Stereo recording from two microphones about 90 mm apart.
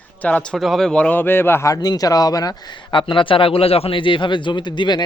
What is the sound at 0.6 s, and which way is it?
A man's voice, centre (ahead or behind).